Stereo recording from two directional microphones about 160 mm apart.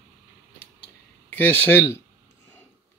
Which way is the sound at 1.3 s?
10° left (ahead or behind).